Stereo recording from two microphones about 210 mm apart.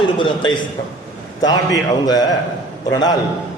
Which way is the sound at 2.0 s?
20° left (ahead or behind).